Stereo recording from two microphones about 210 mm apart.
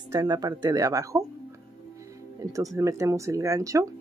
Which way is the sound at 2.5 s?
15° right (ahead or behind).